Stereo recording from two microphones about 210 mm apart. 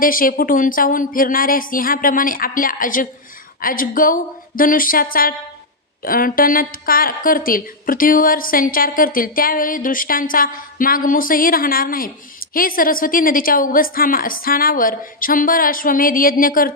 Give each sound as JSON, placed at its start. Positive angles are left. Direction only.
{"t": 0.0, "sound": "a woman's voice", "side_deg": 40}